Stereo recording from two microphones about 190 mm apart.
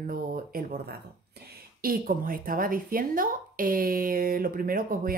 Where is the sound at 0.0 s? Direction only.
45° right (ahead or behind).